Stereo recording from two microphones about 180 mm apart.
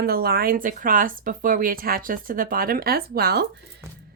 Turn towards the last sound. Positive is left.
turn(degrees=-60)  # may be behind; listen again after turning